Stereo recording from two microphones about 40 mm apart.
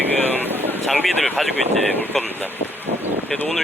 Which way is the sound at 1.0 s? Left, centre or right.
Centre.